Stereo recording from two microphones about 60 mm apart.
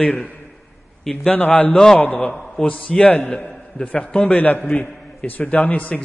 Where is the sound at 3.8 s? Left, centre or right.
Left.